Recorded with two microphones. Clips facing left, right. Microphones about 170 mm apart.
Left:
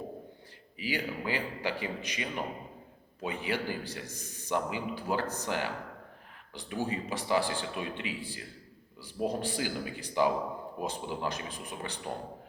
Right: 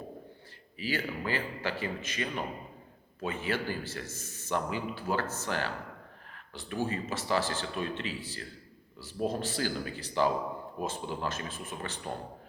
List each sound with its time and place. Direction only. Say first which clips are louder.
0.8 s a man's voice: even; 15° left (ahead or behind)